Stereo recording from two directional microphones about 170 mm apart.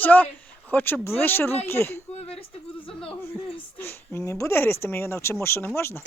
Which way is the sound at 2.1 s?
35° left (ahead or behind).